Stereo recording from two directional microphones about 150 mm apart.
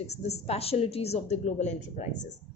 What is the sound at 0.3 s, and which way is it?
A woman's voice, 45° left (ahead or behind).